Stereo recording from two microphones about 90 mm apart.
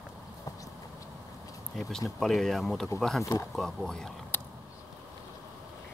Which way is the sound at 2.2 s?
Centre (ahead or behind).